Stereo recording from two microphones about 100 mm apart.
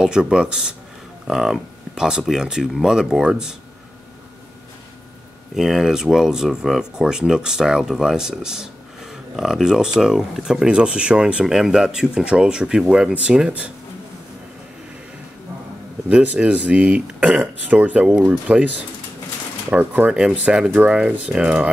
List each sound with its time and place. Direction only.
0.0 s speech: 5° right (ahead or behind)
5.6 s speech: 5° right (ahead or behind)
16.1 s speech: 10° right (ahead or behind)
19.7 s speech: 20° right (ahead or behind)
20.1 s speech: 5° right (ahead or behind)